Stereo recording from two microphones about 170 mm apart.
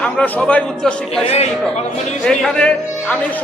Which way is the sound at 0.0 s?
5° left (ahead or behind).